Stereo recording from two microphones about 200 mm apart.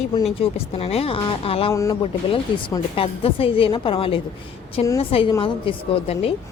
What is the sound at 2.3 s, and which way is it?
A woman's voice, 25° left (ahead or behind).